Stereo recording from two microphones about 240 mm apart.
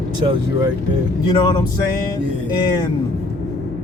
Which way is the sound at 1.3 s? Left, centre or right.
Centre.